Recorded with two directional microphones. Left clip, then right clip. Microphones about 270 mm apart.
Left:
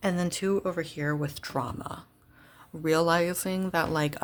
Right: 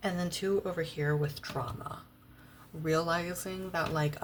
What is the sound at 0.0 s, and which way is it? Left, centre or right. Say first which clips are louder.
Speech: left 4 dB; left.